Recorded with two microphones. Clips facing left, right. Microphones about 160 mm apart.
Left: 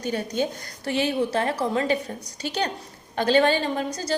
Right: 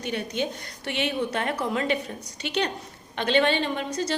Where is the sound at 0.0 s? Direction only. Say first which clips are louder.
Left 3 dB; 40° left (ahead or behind).